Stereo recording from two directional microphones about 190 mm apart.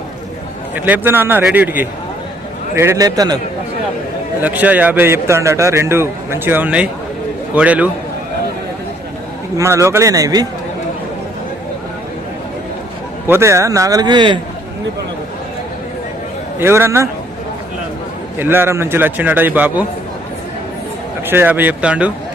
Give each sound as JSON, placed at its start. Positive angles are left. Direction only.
{"t": 0.9, "sound": "a man's voice", "side_deg": -10}
{"t": 4.4, "sound": "a man's voice", "side_deg": -10}
{"t": 9.6, "sound": "a man's voice", "side_deg": -15}
{"t": 13.2, "sound": "a man's voice", "side_deg": -10}
{"t": 16.6, "sound": "a man's voice", "side_deg": -10}
{"t": 18.3, "sound": "a man's voice", "side_deg": -10}
{"t": 21.2, "sound": "a man's voice", "side_deg": -10}